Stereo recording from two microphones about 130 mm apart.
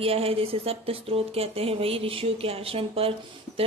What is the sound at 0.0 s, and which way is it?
Speech, 50° right (ahead or behind).